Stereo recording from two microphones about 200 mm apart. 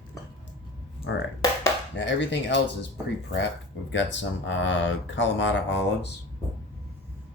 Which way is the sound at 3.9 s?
65° left (ahead or behind).